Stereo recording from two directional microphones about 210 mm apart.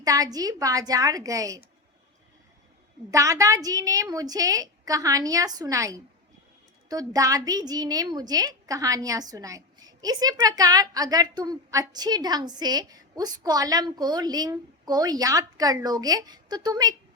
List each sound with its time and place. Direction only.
0.0 s a woman's voice: 15° right (ahead or behind)
3.1 s a woman's voice: 15° right (ahead or behind)